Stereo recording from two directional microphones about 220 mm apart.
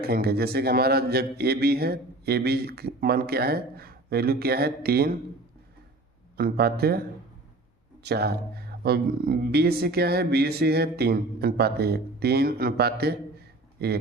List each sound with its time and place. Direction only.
0.0 s speech: 45° right (ahead or behind)
6.3 s speech: 45° right (ahead or behind)
8.0 s speech: 45° right (ahead or behind)